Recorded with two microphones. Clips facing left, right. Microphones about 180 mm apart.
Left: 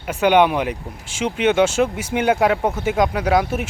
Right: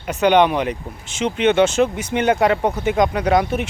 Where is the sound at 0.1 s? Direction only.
10° left (ahead or behind).